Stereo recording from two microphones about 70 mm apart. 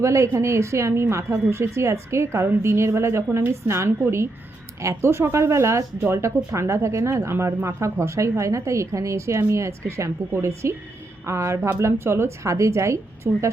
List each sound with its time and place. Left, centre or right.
0.0 s speech: right